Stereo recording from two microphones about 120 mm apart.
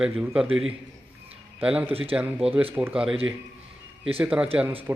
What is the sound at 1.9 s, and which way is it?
Speech, 55° right (ahead or behind).